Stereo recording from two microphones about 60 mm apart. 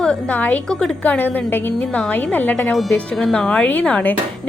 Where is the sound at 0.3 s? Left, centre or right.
Left.